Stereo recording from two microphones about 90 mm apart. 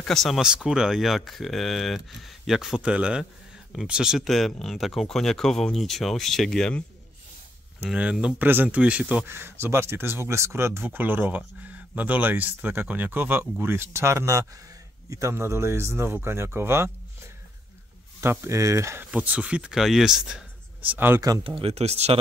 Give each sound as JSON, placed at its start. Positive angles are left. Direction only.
{"t": 0.0, "sound": "speech", "side_deg": 5}
{"t": 0.4, "sound": "speech", "side_deg": -10}
{"t": 7.9, "sound": "speech", "side_deg": -10}
{"t": 8.4, "sound": "speech", "side_deg": -20}
{"t": 9.2, "sound": "speech", "side_deg": -25}
{"t": 18.2, "sound": "speech", "side_deg": -30}
{"t": 19.0, "sound": "speech", "side_deg": -15}
{"t": 20.8, "sound": "speech", "side_deg": -20}
{"t": 21.5, "sound": "speech", "side_deg": -90}